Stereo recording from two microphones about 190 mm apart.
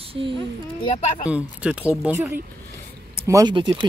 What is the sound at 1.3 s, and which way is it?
Speech, 5° right (ahead or behind).